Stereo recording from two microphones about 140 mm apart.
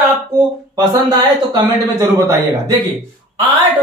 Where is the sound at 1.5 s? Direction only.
25° right (ahead or behind).